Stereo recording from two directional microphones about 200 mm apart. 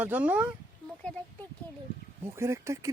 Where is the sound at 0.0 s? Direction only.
5° right (ahead or behind).